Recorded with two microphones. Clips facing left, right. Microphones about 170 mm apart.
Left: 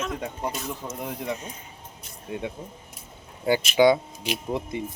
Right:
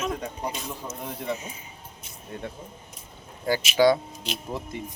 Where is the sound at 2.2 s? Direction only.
15° left (ahead or behind).